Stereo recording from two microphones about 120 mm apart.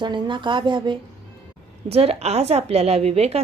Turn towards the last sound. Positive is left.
turn(degrees=-60)  # may be behind; listen again after turning